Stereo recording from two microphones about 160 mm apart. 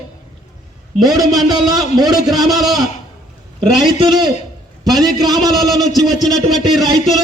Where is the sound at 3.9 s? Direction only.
30° right (ahead or behind).